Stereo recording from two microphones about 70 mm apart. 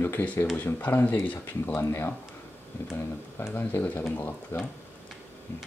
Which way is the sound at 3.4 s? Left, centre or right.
Left.